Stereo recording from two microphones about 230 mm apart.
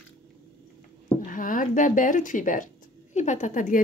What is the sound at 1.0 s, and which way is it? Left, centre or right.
Speech, left.